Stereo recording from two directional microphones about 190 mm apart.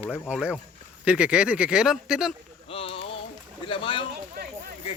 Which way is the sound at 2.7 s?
30° left (ahead or behind).